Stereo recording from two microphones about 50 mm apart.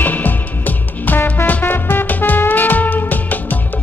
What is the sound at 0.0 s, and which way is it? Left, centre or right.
Music, left.